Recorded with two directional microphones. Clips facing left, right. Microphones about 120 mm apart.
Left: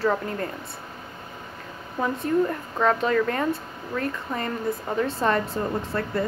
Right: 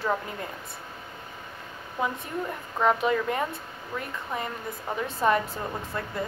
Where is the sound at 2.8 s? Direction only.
15° right (ahead or behind).